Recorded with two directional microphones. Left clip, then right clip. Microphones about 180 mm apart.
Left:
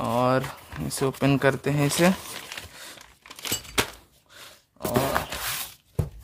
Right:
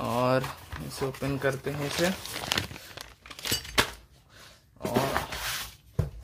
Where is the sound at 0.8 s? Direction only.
45° left (ahead or behind).